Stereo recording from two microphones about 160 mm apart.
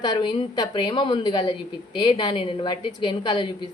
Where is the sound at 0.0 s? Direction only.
25° left (ahead or behind).